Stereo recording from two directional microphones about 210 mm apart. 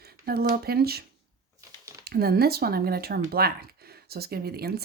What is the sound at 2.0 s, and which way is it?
Speech, 45° right (ahead or behind).